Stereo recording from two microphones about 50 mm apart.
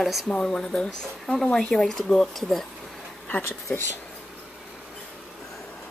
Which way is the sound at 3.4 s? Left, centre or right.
Left.